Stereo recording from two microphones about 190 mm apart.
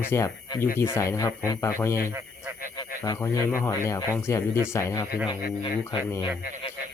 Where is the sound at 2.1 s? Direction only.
15° right (ahead or behind).